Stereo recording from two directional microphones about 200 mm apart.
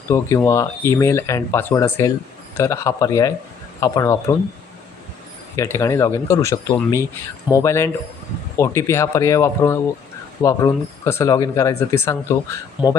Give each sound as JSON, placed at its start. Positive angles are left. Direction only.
{"t": 0.1, "sound": "speech", "side_deg": 15}
{"t": 5.5, "sound": "speech", "side_deg": 15}